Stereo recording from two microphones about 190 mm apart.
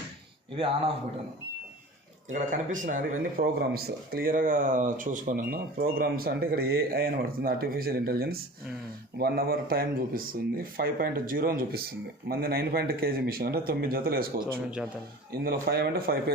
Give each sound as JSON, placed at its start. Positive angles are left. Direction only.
{"t": 2.3, "sound": "speech", "side_deg": -40}